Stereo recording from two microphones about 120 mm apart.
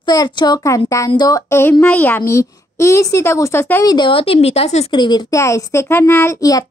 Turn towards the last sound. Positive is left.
turn(degrees=30)  # may be behind; listen again after turning